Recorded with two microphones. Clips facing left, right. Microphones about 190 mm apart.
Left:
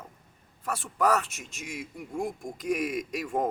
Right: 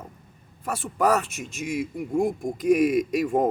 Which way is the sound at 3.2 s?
25° right (ahead or behind).